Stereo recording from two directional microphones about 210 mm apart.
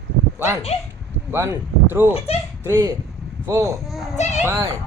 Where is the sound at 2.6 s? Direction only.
15° right (ahead or behind).